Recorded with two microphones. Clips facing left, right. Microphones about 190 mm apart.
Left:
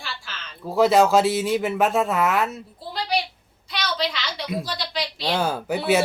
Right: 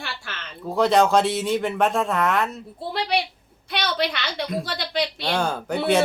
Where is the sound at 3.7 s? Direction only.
60° right (ahead or behind).